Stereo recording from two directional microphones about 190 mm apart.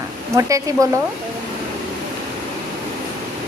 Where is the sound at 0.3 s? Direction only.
15° right (ahead or behind).